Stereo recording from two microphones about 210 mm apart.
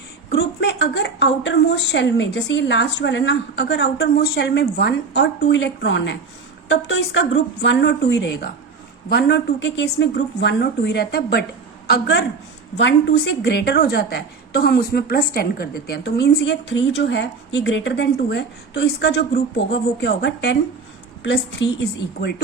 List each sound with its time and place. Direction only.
0.3 s a woman's voice: 50° left (ahead or behind)